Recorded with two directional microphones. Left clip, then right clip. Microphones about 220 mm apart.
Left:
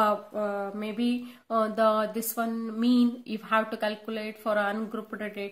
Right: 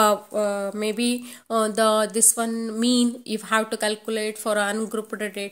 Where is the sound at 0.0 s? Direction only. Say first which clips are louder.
Right 6 dB; 45° right (ahead or behind).